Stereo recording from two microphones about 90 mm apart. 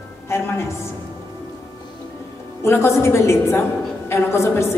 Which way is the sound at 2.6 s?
30° left (ahead or behind).